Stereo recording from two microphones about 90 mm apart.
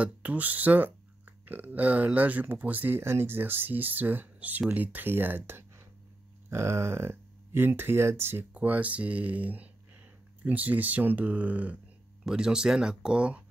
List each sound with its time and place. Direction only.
0.0 s speech: 15° right (ahead or behind)